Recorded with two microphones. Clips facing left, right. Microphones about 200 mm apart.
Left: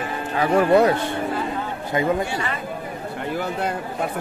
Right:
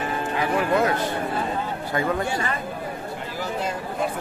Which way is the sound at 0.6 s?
35° left (ahead or behind).